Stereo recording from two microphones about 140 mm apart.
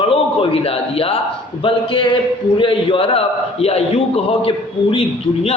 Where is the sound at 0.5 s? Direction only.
45° left (ahead or behind).